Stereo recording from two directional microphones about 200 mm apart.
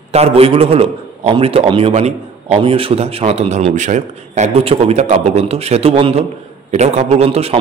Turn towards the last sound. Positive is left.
turn(degrees=-30)  # may be behind; listen again after turning